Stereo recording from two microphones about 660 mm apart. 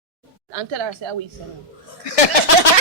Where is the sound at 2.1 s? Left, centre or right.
Left.